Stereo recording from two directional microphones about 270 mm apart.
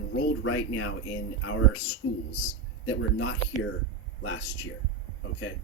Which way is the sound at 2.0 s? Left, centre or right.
Left.